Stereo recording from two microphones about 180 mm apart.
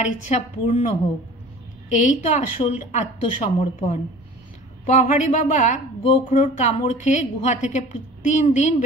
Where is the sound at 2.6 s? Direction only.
40° left (ahead or behind).